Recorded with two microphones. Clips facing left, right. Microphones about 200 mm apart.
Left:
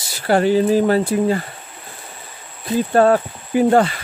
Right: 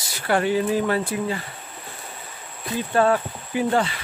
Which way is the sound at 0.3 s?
35° left (ahead or behind).